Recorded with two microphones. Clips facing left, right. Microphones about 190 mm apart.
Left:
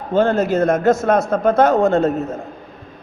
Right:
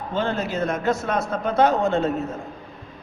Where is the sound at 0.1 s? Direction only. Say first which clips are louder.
Left 10 dB; 45° left (ahead or behind).